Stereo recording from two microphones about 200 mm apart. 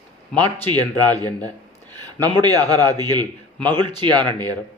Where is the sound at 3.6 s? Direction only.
10° left (ahead or behind).